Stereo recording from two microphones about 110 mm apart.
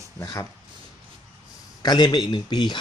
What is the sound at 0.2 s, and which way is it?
Speech, 30° left (ahead or behind).